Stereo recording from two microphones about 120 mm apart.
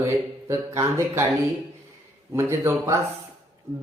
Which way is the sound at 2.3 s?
25° right (ahead or behind).